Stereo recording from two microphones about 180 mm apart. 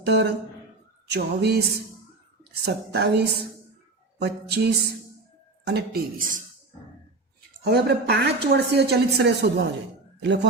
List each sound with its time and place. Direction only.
0.0 s speech: 70° right (ahead or behind)
5.6 s speech: 60° right (ahead or behind)
7.6 s speech: 65° right (ahead or behind)
10.2 s speech: 75° right (ahead or behind)